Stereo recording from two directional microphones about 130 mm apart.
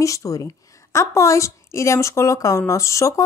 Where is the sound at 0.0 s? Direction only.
25° left (ahead or behind).